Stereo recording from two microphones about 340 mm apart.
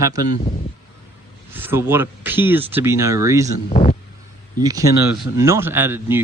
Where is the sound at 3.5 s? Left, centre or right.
Centre.